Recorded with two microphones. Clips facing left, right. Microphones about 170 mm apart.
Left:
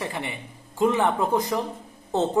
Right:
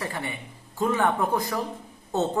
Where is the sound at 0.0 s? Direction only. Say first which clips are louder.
Left 1 dB; 15° left (ahead or behind).